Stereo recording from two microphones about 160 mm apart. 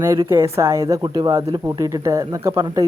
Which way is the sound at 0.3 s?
15° right (ahead or behind).